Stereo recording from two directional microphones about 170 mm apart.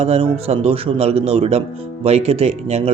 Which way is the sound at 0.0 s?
40° right (ahead or behind).